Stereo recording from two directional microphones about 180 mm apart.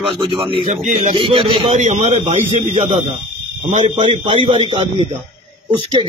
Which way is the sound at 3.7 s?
30° right (ahead or behind).